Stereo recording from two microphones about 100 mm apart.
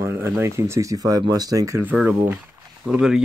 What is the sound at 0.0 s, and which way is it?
Speech, 25° right (ahead or behind).